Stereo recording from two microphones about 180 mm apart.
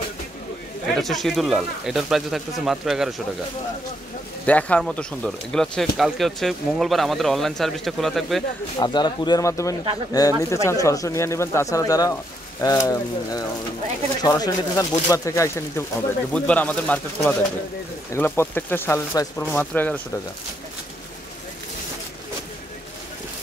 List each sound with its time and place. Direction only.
0.9 s speech: centre (ahead or behind)
4.5 s speech: 10° left (ahead or behind)
8.7 s speech: 25° left (ahead or behind)